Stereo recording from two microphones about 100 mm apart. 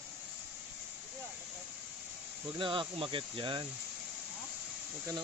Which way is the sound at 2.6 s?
55° right (ahead or behind).